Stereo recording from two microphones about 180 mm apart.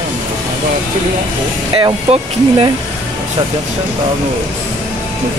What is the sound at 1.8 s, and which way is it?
Speech, 30° right (ahead or behind).